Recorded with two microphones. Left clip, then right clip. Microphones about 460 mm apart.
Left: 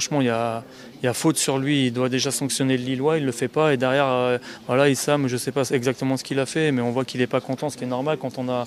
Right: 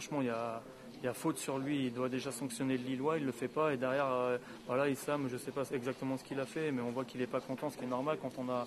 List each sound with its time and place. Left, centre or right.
0.0 s speech: left